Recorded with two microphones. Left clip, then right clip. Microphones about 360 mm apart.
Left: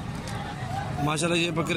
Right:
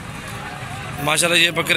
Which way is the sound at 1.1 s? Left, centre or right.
Centre.